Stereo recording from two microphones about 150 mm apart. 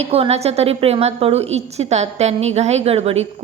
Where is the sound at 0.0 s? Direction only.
45° right (ahead or behind).